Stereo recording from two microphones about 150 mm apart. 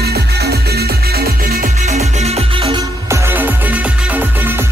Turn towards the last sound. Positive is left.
turn(degrees=-15)  # may be behind; listen again after turning